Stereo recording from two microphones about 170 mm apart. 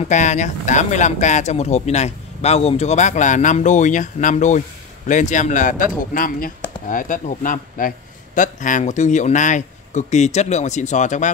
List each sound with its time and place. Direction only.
0.0 s speech: 45° left (ahead or behind)